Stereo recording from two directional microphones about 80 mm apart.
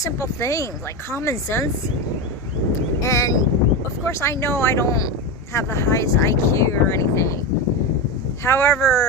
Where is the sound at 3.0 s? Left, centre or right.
Left.